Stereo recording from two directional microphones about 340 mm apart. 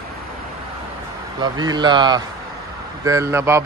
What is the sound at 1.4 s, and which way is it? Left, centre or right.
Speech, centre.